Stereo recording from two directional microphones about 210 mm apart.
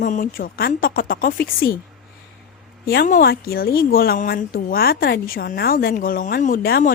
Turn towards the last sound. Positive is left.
turn(degrees=45)  # may be behind; listen again after turning